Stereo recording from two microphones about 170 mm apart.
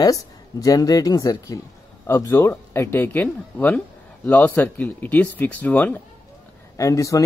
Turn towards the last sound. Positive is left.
turn(degrees=20)  # may be behind; listen again after turning